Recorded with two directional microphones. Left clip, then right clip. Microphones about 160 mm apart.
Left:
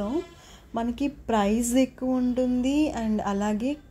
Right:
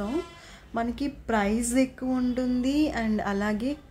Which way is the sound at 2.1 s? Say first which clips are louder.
Left 2 dB; 5° left (ahead or behind).